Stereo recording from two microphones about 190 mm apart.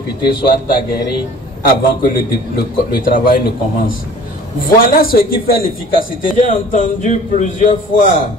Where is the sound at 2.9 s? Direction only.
45° left (ahead or behind).